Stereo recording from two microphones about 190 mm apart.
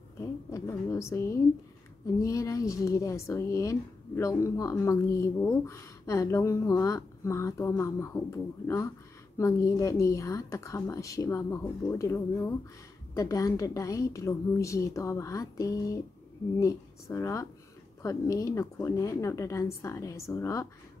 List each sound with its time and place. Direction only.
0.2 s speech: 15° left (ahead or behind)